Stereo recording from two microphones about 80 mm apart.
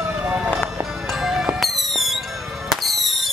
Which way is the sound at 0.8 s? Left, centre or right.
Centre.